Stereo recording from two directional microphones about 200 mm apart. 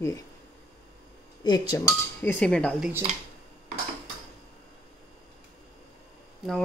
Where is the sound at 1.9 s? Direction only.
5° left (ahead or behind).